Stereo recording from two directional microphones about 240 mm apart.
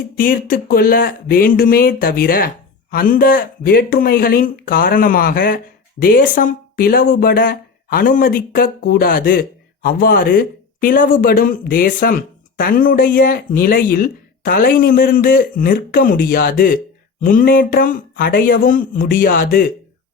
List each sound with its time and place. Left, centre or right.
0.2 s speech: left